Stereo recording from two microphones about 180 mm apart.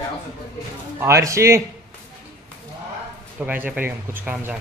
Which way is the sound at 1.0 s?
15° right (ahead or behind).